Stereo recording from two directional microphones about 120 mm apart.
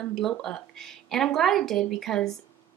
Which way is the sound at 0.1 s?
5° left (ahead or behind).